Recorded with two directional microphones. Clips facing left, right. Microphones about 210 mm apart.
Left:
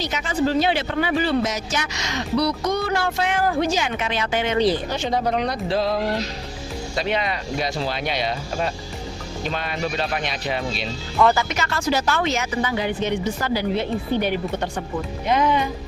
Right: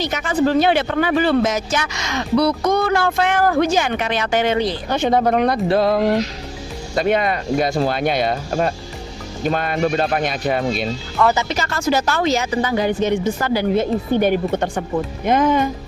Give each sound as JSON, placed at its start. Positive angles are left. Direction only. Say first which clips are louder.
{"t": 0.0, "sound": "a woman's voice", "louder": "right 4 dB", "side_deg": -55}
{"t": 4.9, "sound": "a woman's voice", "louder": "right 6 dB", "side_deg": -55}
{"t": 11.3, "sound": "speech", "louder": "right 2 dB", "side_deg": -30}
{"t": 11.9, "sound": "a woman's voice", "louder": "right 4 dB", "side_deg": -45}